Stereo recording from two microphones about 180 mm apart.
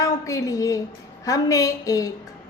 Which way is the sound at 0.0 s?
20° left (ahead or behind).